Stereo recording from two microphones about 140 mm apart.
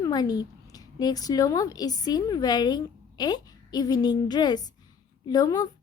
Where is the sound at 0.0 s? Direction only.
30° left (ahead or behind).